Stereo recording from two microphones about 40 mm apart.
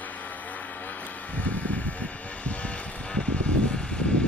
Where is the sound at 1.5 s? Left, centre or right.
Left.